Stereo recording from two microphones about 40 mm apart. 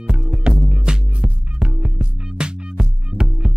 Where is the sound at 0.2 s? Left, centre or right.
Centre.